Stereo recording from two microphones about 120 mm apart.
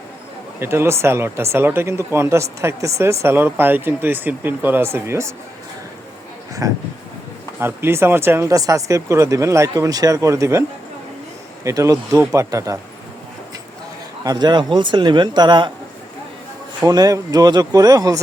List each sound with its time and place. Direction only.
0.6 s speech: 20° right (ahead or behind)
6.6 s speech: 30° right (ahead or behind)
11.6 s speech: 25° right (ahead or behind)
14.3 s speech: 35° right (ahead or behind)
16.8 s speech: 30° right (ahead or behind)